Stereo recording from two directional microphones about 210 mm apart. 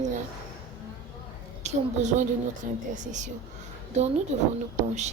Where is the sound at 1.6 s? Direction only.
35° right (ahead or behind).